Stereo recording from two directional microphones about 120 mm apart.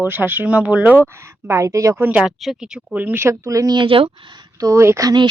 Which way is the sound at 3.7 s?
45° right (ahead or behind).